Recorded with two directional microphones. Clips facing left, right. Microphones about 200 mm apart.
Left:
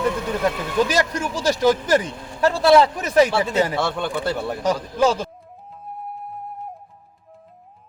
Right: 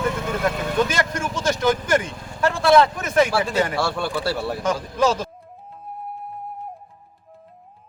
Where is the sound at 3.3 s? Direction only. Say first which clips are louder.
Left 1 dB; 20° left (ahead or behind).